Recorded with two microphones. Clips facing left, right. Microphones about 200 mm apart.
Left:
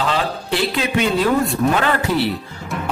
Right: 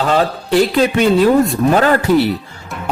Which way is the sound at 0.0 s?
45° right (ahead or behind).